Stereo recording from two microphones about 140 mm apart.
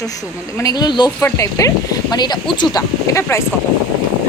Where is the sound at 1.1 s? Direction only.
15° left (ahead or behind).